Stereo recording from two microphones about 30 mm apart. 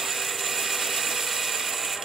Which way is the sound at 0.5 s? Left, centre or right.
Centre.